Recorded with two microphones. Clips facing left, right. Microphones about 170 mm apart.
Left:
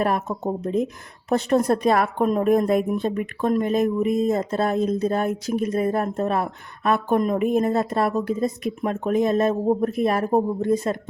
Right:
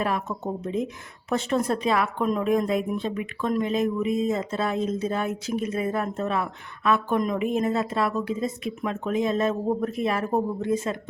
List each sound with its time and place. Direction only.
0.0 s speech: 40° left (ahead or behind)